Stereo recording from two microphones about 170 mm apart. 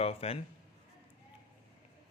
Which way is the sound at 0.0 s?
35° left (ahead or behind).